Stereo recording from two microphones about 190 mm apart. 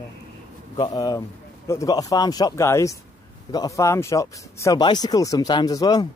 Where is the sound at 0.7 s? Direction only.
20° left (ahead or behind).